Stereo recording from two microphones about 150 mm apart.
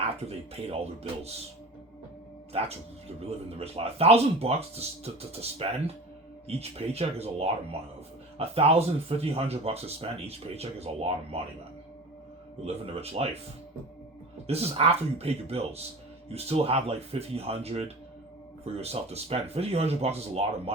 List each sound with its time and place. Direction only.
0.3 s speech: 40° right (ahead or behind)
2.5 s speech: 40° right (ahead or behind)
12.6 s speech: 40° right (ahead or behind)
14.4 s speech: 40° right (ahead or behind)